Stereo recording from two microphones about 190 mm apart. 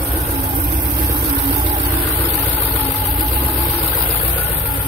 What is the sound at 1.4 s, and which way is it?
Vehicle, 25° right (ahead or behind).